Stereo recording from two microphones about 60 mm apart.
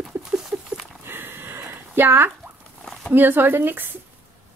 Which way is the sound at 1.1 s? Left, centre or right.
Right.